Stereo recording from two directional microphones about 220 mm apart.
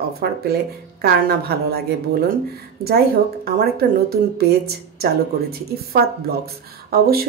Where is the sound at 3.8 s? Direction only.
45° right (ahead or behind).